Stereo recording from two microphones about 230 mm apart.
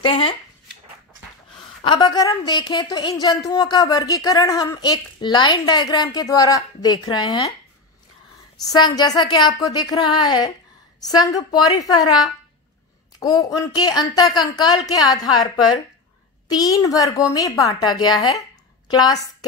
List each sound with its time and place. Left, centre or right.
0.0 s speech: left
1.8 s a woman's voice: left
8.7 s a woman's voice: centre